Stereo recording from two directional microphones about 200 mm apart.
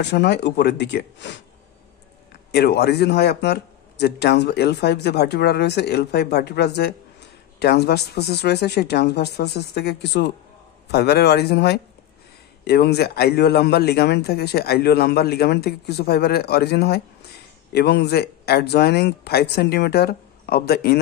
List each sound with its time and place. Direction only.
0.0 s speech: 60° left (ahead or behind)
2.5 s speech: 55° left (ahead or behind)